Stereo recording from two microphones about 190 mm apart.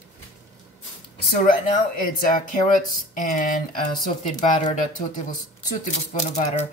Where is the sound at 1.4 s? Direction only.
45° left (ahead or behind).